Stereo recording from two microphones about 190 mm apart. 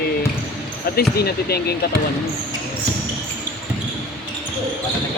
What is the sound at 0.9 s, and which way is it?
Speech, 55° left (ahead or behind).